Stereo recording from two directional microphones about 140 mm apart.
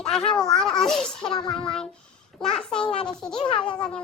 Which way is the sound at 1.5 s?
5° left (ahead or behind).